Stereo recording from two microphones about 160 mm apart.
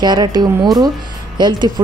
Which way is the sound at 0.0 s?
25° right (ahead or behind).